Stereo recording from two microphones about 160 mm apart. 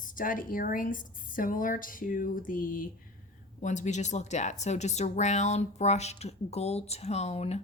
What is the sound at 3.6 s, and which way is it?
Speech, 50° left (ahead or behind).